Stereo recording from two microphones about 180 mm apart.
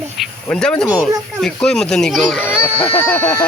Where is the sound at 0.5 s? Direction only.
5° left (ahead or behind).